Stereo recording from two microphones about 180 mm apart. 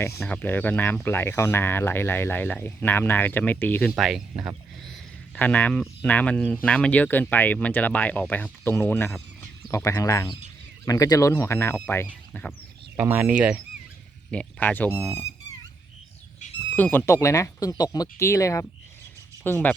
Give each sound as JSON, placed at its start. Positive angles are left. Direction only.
{"t": 0.0, "sound": "speech", "side_deg": 10}
{"t": 3.9, "sound": "speech", "side_deg": 0}
{"t": 5.3, "sound": "speech", "side_deg": 10}
{"t": 13.0, "sound": "speech", "side_deg": -10}
{"t": 14.3, "sound": "speech", "side_deg": 5}
{"t": 15.1, "sound": "fowl", "side_deg": 15}
{"t": 16.7, "sound": "speech", "side_deg": 10}